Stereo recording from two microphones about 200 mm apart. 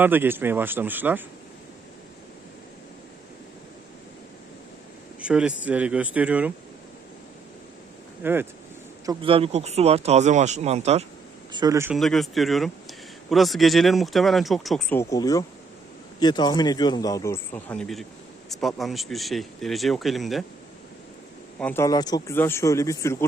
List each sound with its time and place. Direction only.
0.0 s speech: 10° right (ahead or behind)
5.2 s speech: 5° right (ahead or behind)
8.2 s speech: 10° right (ahead or behind)
9.0 s speech: 25° right (ahead or behind)
11.5 s speech: 15° right (ahead or behind)
11.9 s speech: centre (ahead or behind)
14.9 s speech: 15° left (ahead or behind); by 20.4 s centre (ahead or behind)
21.6 s speech: 10° left (ahead or behind)